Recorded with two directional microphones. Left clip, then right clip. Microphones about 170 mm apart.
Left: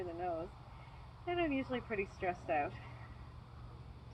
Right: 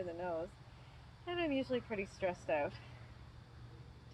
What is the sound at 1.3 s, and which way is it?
Speech, 45° right (ahead or behind).